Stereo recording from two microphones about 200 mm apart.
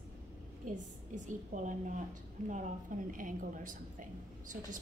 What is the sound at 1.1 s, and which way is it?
A woman's voice, 40° right (ahead or behind).